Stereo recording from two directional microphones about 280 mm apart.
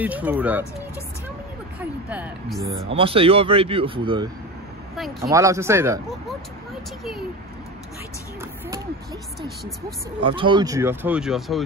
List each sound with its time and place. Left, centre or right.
0.0 s speech: centre
1.8 s speech: centre
3.0 s a man's voice: centre
4.9 s speech: centre
5.3 s speech: centre
8.4 s a sound: centre
10.2 s speech: centre